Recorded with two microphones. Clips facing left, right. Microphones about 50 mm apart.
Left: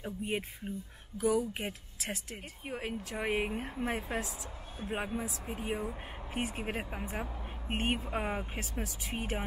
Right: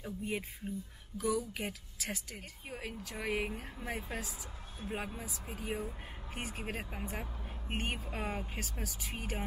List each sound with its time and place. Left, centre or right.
0.0 s speech: left
2.7 s speech: left
4.7 s speech: left
7.8 s speech: left